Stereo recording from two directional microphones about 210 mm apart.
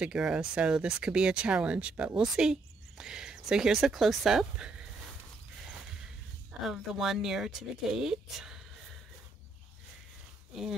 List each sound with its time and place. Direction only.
0.0 s speech: 5° right (ahead or behind)
6.6 s speech: centre (ahead or behind)